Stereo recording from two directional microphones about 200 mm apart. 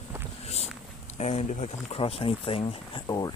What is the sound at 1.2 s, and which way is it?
Speech, 35° left (ahead or behind).